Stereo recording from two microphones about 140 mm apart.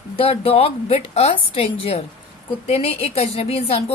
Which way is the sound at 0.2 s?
45° left (ahead or behind).